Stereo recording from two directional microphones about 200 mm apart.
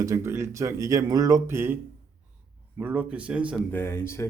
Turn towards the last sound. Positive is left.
turn(degrees=15)  # may be behind; listen again after turning